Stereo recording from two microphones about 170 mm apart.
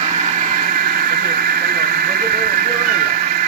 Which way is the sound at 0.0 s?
40° right (ahead or behind).